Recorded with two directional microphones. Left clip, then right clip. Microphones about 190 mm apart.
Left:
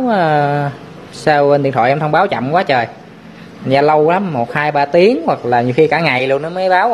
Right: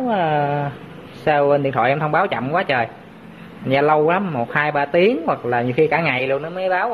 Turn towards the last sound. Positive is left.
turn(degrees=20)  # may be behind; listen again after turning